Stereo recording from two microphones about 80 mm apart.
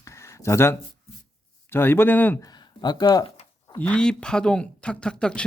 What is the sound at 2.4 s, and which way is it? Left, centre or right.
Speech, left.